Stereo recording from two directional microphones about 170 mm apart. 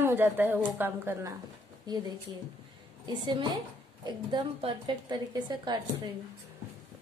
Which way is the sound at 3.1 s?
25° right (ahead or behind).